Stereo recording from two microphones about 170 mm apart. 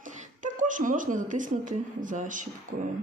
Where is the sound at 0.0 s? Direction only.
50° right (ahead or behind).